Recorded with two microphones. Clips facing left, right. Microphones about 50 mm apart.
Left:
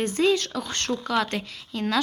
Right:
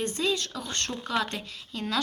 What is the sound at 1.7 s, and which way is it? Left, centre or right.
Speech, centre.